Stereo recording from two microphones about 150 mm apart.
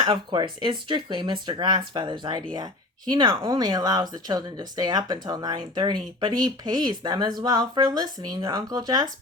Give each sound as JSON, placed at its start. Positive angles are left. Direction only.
{"t": 0.0, "sound": "speech", "side_deg": -30}